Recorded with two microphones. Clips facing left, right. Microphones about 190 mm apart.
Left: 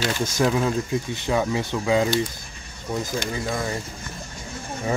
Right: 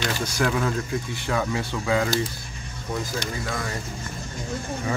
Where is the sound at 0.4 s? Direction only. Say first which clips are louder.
Left 3 dB; 20° left (ahead or behind).